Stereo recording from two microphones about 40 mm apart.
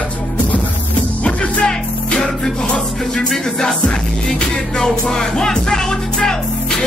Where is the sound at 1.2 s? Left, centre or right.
Left.